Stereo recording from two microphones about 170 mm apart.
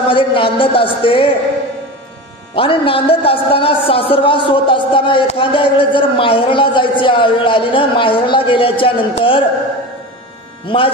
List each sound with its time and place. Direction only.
0.1 s a man's voice: 30° left (ahead or behind)
2.5 s a man's voice: 30° left (ahead or behind)
10.7 s a man's voice: 30° left (ahead or behind)